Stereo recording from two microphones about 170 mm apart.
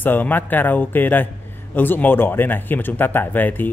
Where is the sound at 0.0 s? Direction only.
10° left (ahead or behind).